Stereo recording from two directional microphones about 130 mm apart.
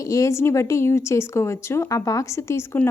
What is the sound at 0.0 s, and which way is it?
Speech, 25° left (ahead or behind).